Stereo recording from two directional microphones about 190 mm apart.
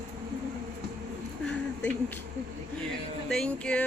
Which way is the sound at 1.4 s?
10° left (ahead or behind).